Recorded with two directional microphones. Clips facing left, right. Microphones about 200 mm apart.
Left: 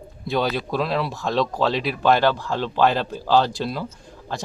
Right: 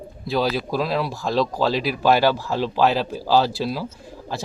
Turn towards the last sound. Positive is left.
turn(degrees=-5)  # may be behind; listen again after turning